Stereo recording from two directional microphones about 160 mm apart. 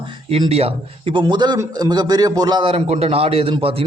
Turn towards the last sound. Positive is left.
turn(degrees=-35)  # may be behind; listen again after turning